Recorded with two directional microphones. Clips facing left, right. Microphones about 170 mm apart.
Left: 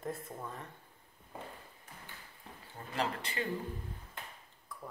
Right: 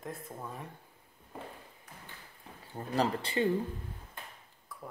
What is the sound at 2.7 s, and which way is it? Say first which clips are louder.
Speech: right 6 dB; 35° right (ahead or behind).